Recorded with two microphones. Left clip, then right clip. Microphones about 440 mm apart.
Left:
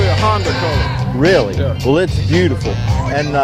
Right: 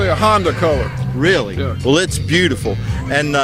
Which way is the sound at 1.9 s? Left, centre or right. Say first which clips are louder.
Even; centre.